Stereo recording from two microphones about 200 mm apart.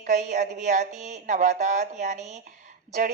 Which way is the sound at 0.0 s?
35° right (ahead or behind).